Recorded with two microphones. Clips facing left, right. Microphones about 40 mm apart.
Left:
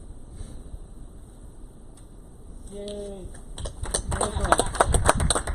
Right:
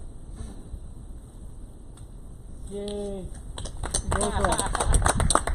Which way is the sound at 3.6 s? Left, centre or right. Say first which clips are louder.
Left 1 dB; right.